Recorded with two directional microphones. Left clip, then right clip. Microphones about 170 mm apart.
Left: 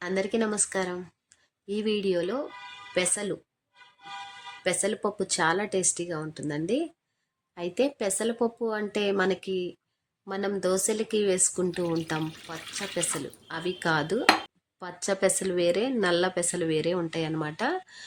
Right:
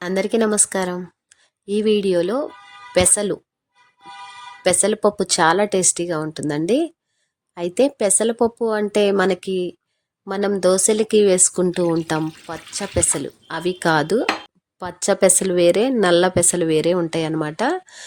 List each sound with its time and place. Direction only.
0.0 s a woman's voice: 55° right (ahead or behind)
4.6 s speech: 55° right (ahead or behind)